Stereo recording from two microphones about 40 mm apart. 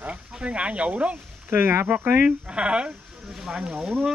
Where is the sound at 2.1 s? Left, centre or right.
Right.